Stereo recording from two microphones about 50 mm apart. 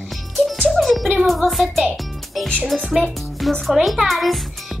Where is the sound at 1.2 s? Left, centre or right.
Centre.